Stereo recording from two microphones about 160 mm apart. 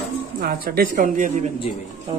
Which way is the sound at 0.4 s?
70° right (ahead or behind).